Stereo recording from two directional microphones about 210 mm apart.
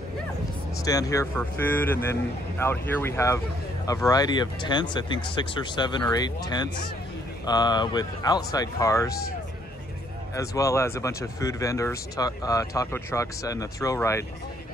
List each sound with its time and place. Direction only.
0.8 s speech: 15° left (ahead or behind)
10.3 s speech: 15° left (ahead or behind)